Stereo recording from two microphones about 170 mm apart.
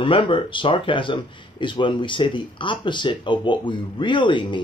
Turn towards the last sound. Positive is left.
turn(degrees=30)  # may be behind; listen again after turning